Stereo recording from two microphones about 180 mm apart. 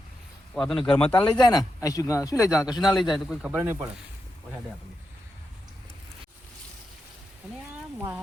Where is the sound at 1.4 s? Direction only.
20° left (ahead or behind).